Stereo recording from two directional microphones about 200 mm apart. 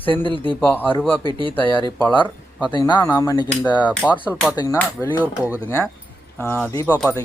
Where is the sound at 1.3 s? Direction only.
25° right (ahead or behind).